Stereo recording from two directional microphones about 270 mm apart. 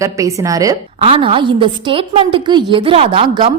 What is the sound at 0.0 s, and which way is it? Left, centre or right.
A woman's voice, centre.